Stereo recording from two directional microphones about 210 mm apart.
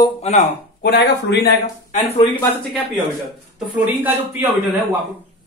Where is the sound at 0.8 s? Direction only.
55° left (ahead or behind).